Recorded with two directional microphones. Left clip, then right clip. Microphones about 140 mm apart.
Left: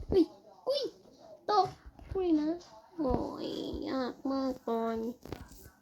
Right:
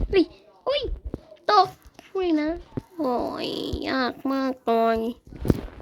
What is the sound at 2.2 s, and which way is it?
Speech, 5° right (ahead or behind).